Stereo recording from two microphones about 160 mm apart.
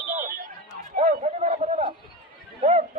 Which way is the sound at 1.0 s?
45° right (ahead or behind).